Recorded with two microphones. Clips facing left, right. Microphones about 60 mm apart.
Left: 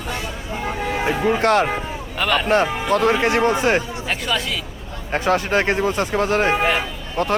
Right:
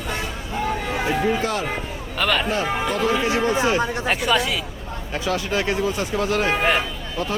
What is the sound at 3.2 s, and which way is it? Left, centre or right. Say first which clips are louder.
Speech: left 3 dB; left.